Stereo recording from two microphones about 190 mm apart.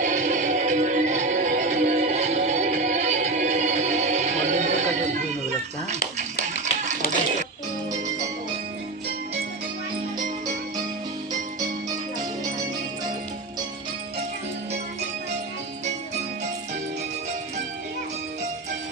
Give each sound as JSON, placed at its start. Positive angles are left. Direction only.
{"t": 0.0, "sound": "music", "side_deg": -40}